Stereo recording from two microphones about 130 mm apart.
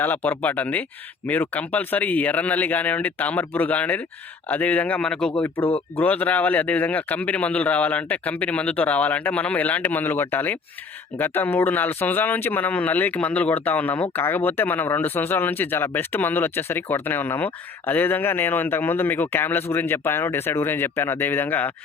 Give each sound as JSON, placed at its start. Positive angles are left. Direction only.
{"t": 0.0, "sound": "speech", "side_deg": 15}